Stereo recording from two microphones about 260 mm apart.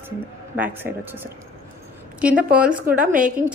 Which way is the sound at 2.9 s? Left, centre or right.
Right.